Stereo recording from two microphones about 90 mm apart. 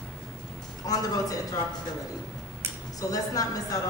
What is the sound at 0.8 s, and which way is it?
Speech, 45° left (ahead or behind).